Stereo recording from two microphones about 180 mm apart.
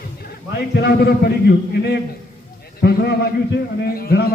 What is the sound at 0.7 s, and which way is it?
A man's voice, 65° left (ahead or behind).